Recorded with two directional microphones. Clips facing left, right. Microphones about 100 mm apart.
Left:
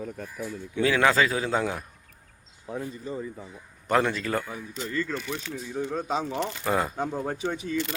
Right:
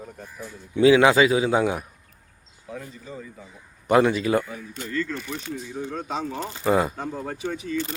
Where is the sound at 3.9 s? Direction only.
10° right (ahead or behind).